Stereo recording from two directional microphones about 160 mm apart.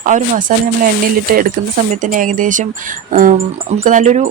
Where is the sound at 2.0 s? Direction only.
55° right (ahead or behind).